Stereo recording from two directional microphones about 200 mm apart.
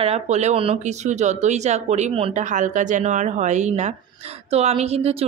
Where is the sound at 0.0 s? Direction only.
35° right (ahead or behind).